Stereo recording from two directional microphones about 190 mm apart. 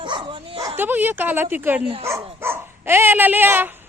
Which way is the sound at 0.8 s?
10° right (ahead or behind).